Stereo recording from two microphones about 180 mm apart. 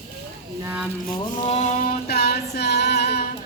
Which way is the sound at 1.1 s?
30° left (ahead or behind).